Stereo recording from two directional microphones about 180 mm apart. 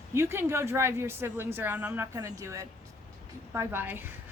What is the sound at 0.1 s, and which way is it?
A woman's voice, 15° right (ahead or behind).